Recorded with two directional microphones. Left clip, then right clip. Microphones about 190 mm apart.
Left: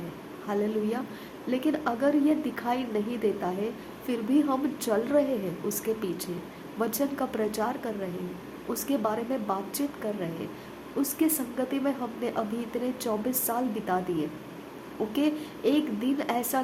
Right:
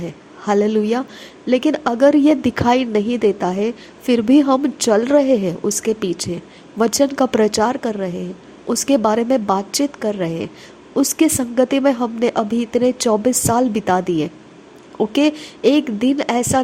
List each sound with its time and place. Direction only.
0.4 s a woman's voice: 45° right (ahead or behind)